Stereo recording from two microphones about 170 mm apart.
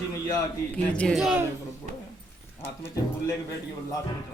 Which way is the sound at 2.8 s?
15° left (ahead or behind).